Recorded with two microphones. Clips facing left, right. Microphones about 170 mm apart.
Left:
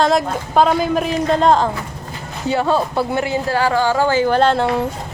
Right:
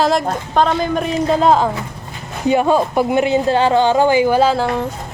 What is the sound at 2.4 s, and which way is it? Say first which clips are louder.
Speech: right 3 dB; 15° right (ahead or behind).